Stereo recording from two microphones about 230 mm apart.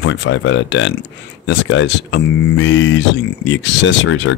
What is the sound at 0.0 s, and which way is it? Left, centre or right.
Speech, left.